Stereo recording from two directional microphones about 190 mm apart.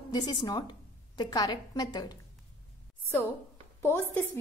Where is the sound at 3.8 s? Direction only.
15° left (ahead or behind).